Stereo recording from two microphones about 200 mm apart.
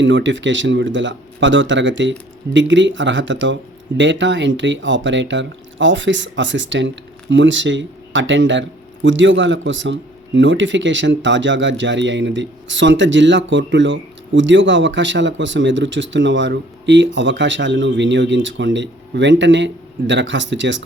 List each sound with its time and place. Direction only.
0.0 s speech: 65° right (ahead or behind)